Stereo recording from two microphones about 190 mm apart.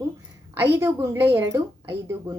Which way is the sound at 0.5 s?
15° right (ahead or behind).